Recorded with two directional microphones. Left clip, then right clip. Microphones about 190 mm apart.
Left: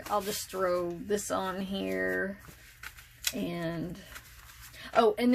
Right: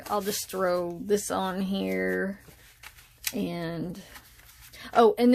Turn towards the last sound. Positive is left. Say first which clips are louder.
# right 5 dB
turn(degrees=-55)  # may be behind; listen again after turning